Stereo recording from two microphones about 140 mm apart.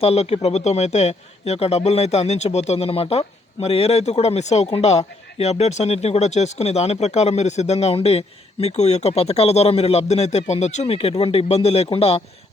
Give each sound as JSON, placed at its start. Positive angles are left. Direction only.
{"t": 0.0, "sound": "a man's voice", "side_deg": 45}